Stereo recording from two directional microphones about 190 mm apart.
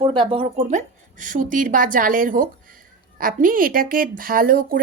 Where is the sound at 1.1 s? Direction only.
45° right (ahead or behind).